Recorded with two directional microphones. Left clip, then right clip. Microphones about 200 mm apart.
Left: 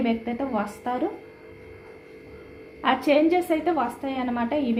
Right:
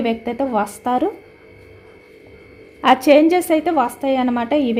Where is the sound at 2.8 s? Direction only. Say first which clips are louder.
Right 9 dB; 60° right (ahead or behind).